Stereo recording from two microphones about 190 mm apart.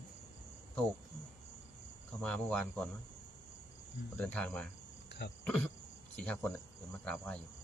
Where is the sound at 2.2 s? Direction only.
5° left (ahead or behind).